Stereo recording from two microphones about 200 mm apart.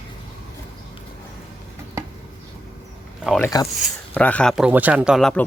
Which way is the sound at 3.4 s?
15° left (ahead or behind).